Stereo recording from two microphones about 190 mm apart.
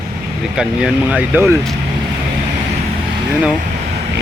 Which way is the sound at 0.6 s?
5° right (ahead or behind).